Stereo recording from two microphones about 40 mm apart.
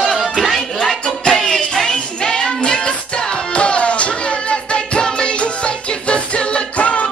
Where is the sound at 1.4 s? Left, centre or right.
Centre.